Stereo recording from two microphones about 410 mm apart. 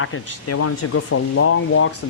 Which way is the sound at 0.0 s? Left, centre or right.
Left.